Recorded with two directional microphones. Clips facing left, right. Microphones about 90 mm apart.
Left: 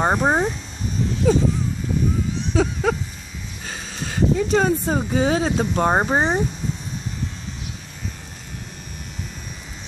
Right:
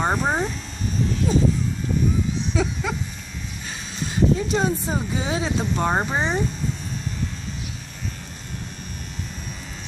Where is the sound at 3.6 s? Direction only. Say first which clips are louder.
Left 1 dB; 55° left (ahead or behind).